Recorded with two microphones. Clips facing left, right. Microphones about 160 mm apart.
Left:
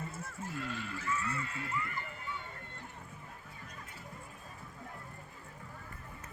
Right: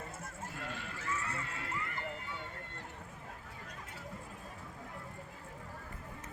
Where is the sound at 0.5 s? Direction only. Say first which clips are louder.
Left 6 dB; 55° right (ahead or behind); by 2.4 s 75° right (ahead or behind).